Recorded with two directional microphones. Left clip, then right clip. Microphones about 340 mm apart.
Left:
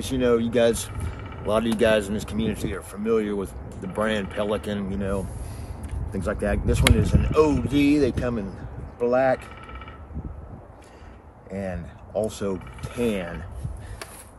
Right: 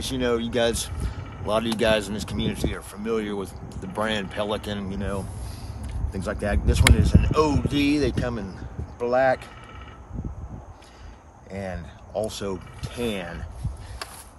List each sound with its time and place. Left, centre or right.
0.0 s speech: centre
11.5 s speech: centre